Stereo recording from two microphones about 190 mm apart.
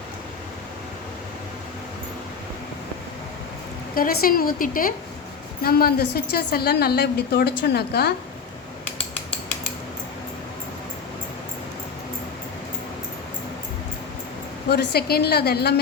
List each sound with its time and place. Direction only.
3.9 s a woman's voice: 50° left (ahead or behind)
14.7 s a woman's voice: 55° left (ahead or behind)